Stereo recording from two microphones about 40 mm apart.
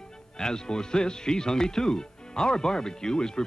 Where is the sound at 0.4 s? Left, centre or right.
Centre.